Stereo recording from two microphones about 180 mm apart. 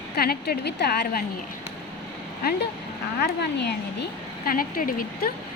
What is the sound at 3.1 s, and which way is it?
A woman's voice, 60° left (ahead or behind).